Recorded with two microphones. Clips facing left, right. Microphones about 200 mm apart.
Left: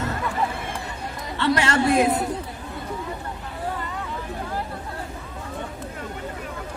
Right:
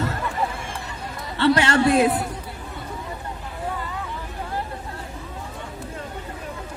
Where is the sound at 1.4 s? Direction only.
30° right (ahead or behind).